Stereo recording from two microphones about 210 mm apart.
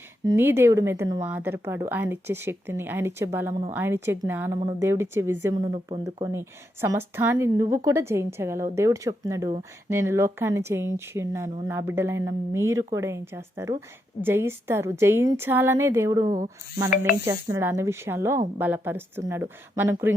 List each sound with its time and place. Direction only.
0.3 s speech: 10° right (ahead or behind)
5.7 s speech: 25° right (ahead or behind)
6.8 s speech: 10° right (ahead or behind)